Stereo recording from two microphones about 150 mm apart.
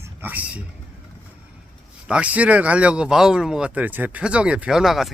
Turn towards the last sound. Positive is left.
turn(degrees=0)  # may be behind; listen again after turning